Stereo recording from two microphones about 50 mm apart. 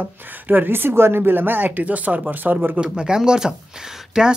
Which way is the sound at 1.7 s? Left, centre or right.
Right.